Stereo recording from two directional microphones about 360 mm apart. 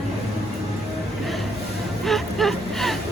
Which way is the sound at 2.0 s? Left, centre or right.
Centre.